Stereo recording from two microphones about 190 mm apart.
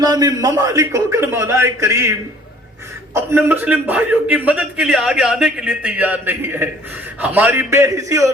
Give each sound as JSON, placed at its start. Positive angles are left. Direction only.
{"t": 0.0, "sound": "a man's voice", "side_deg": -20}
{"t": 3.2, "sound": "a man's voice", "side_deg": -10}